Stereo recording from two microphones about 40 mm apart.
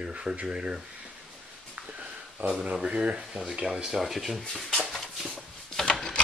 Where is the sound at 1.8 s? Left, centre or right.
Right.